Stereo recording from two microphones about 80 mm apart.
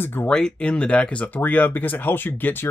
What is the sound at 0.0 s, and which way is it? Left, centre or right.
Speech, left.